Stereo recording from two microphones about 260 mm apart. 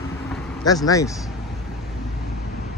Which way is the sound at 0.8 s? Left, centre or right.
Centre.